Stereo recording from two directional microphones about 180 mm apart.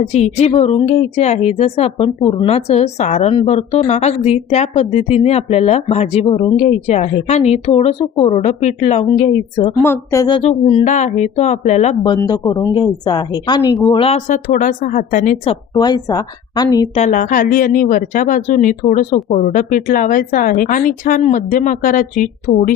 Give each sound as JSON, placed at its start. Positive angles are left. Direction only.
{"t": 0.0, "sound": "speech", "side_deg": 35}
{"t": 9.8, "sound": "speech", "side_deg": 15}
{"t": 12.2, "sound": "a woman's voice", "side_deg": 20}
{"t": 14.0, "sound": "speech", "side_deg": 35}
{"t": 14.4, "sound": "a woman's voice", "side_deg": 45}
{"t": 15.7, "sound": "a woman's voice", "side_deg": 20}
{"t": 16.9, "sound": "a woman's voice", "side_deg": 45}